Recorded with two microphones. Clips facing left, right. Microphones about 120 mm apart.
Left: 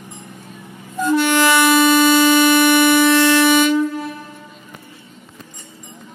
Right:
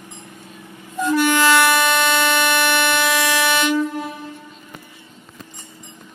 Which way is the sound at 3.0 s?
5° right (ahead or behind).